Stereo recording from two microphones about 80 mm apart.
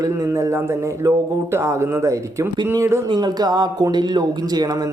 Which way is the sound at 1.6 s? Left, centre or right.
Right.